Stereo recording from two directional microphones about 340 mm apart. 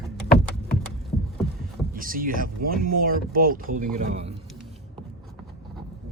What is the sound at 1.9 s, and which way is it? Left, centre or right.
Speech, right.